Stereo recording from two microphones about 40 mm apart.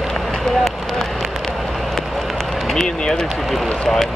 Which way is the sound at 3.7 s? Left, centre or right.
Centre.